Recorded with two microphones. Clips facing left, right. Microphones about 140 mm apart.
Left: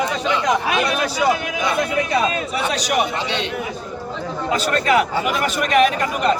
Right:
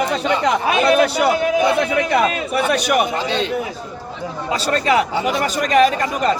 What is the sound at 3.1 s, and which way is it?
Speech, 40° right (ahead or behind).